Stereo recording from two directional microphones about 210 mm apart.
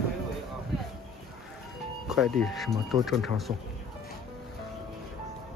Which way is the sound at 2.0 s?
Centre (ahead or behind).